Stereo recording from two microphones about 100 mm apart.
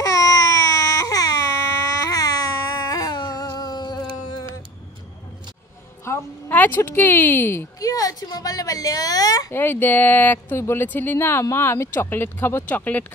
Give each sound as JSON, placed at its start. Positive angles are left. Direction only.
{"t": 0.0, "sound": "baby cry", "side_deg": 35}
{"t": 6.1, "sound": "a sound", "side_deg": 30}
{"t": 6.5, "sound": "speech", "side_deg": 20}
{"t": 7.8, "sound": "a woman's voice", "side_deg": 35}
{"t": 9.5, "sound": "speech", "side_deg": 20}